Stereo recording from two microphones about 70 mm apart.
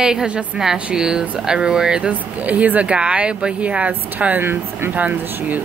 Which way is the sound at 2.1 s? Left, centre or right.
Right.